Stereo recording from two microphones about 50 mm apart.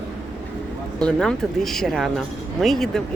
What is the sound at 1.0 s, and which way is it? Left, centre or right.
Speech, centre.